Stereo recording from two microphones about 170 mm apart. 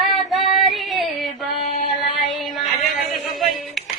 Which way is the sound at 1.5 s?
40° left (ahead or behind).